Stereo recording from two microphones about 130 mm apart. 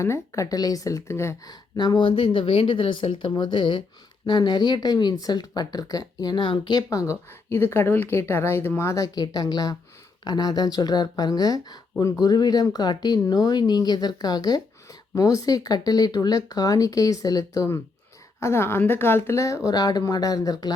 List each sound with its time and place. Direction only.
0.0 s speech: 25° left (ahead or behind)
1.7 s speech: 35° left (ahead or behind)